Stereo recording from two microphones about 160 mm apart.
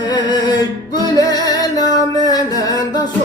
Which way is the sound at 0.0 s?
25° left (ahead or behind).